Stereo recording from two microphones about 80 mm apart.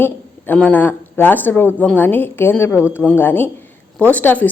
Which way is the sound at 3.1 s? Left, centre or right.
Left.